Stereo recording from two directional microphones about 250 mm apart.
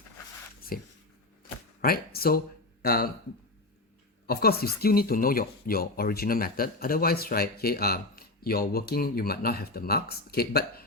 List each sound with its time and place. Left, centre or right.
0.7 s speech: left
4.3 s speech: left